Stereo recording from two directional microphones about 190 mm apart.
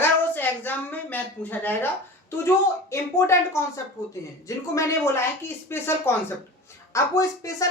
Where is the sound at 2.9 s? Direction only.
15° left (ahead or behind).